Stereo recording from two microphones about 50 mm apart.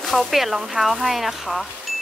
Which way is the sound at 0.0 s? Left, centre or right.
Centre.